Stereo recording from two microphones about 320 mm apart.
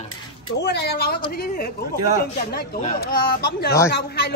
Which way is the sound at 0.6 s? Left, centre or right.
Left.